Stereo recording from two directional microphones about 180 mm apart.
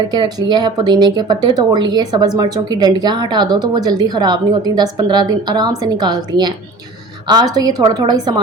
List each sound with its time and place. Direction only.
0.1 s speech: 25° right (ahead or behind)